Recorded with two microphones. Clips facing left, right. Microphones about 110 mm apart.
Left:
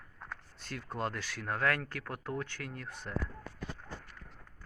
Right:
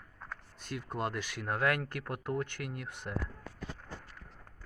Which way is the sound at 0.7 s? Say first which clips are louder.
Right 1 dB; 10° right (ahead or behind).